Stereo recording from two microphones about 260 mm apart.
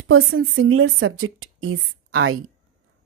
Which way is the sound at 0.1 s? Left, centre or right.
Right.